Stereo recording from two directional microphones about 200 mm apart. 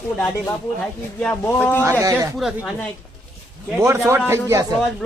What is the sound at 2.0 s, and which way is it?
Speech, 15° right (ahead or behind).